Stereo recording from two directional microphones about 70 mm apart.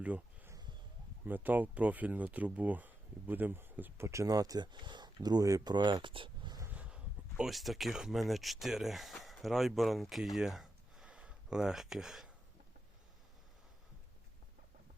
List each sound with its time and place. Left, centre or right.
1.2 s speech: right
4.0 s speech: right
5.6 s speech: right
6.7 s a sound: centre
7.5 s speech: centre
10.3 s a sound: centre